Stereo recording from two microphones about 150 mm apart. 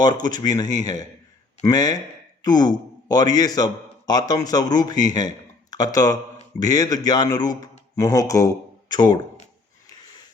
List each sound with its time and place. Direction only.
0.0 s a man's voice: 25° left (ahead or behind)